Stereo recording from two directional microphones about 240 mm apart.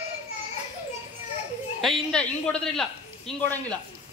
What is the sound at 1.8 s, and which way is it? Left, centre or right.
A man's voice, centre.